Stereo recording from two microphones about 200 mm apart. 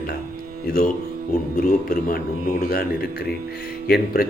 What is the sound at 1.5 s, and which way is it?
A man's voice, 45° left (ahead or behind).